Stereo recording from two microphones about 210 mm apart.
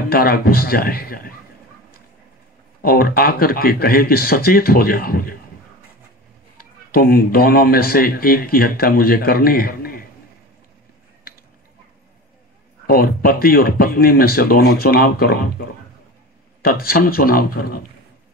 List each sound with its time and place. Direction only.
0.1 s speech: 45° left (ahead or behind)
2.8 s speech: 45° left (ahead or behind)
6.6 s speech: 45° left (ahead or behind)
12.8 s speech: 45° left (ahead or behind)
16.6 s speech: 45° left (ahead or behind)